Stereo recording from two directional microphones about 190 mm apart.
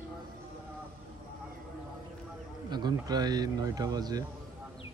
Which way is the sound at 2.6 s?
20° right (ahead or behind).